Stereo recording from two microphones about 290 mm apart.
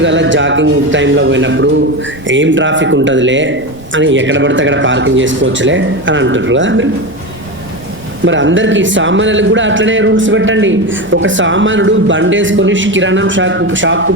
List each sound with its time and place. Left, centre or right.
0.0 s a man's voice: right
8.2 s a man's voice: right